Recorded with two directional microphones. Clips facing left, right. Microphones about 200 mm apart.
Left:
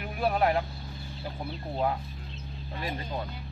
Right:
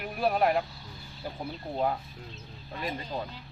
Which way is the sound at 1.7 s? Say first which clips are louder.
Even; centre (ahead or behind).